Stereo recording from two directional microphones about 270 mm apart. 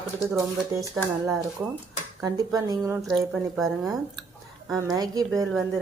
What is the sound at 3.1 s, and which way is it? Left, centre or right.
Speech, centre.